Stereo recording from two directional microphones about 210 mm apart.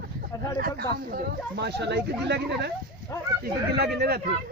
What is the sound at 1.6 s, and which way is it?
Speech, 55° right (ahead or behind).